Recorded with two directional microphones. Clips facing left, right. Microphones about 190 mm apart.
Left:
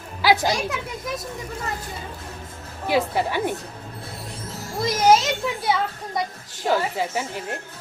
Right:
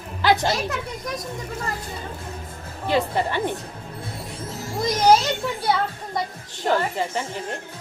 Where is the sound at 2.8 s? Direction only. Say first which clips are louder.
Even; 5° left (ahead or behind).